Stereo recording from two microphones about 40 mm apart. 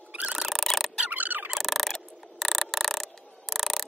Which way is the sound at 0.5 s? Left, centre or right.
Centre.